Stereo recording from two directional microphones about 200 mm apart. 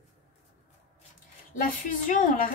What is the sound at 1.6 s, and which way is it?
Speech, 45° left (ahead or behind).